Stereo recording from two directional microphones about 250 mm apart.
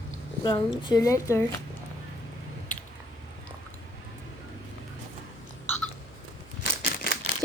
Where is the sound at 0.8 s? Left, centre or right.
Centre.